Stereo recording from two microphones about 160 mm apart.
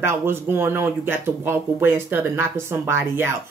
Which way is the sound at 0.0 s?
15° right (ahead or behind).